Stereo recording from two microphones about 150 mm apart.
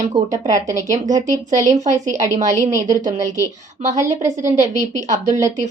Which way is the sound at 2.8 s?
55° right (ahead or behind).